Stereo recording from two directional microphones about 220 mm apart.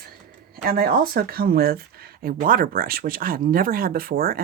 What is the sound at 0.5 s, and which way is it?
Speech, 45° right (ahead or behind).